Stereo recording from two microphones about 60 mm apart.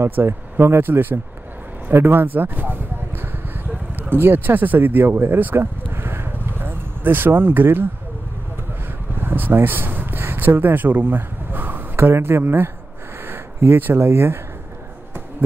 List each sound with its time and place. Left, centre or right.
0.0 s speech: right
9.2 s a sound: right
12.1 s speech: right